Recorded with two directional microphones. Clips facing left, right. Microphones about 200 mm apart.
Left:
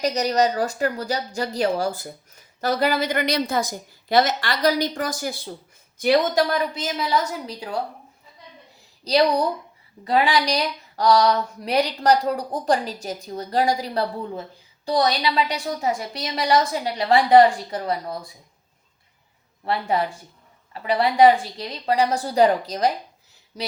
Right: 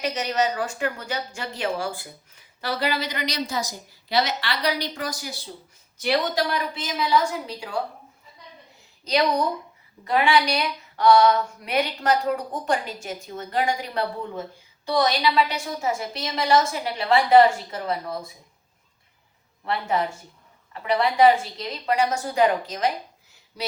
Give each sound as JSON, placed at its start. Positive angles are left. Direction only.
{"t": 0.0, "sound": "a woman's voice", "side_deg": 40}
{"t": 9.0, "sound": "a woman's voice", "side_deg": 35}
{"t": 20.8, "sound": "speech", "side_deg": 35}